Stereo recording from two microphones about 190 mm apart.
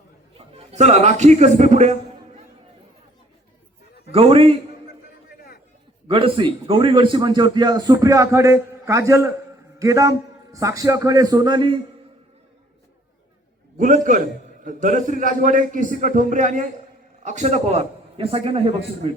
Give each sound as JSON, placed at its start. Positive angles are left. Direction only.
{"t": 0.3, "sound": "a man's voice", "side_deg": -35}
{"t": 4.1, "sound": "a man's voice", "side_deg": -30}
{"t": 6.1, "sound": "a man's voice", "side_deg": -30}
{"t": 13.7, "sound": "a man's voice", "side_deg": -40}